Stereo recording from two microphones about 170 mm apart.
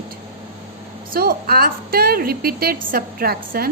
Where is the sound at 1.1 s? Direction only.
65° right (ahead or behind).